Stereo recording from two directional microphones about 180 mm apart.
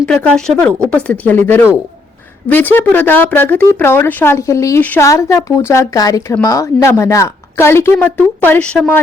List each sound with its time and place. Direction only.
0.0 s a woman's voice: 5° left (ahead or behind)